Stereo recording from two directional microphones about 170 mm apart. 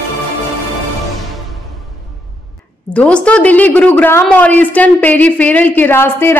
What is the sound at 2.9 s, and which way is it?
A woman's voice, 5° left (ahead or behind).